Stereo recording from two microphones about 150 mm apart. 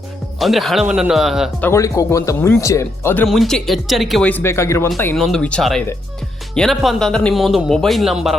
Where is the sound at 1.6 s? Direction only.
20° left (ahead or behind).